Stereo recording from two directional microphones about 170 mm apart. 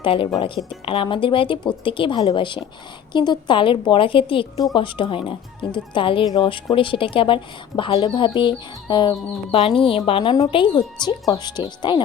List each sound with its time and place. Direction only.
0.0 s a woman's voice: 30° left (ahead or behind)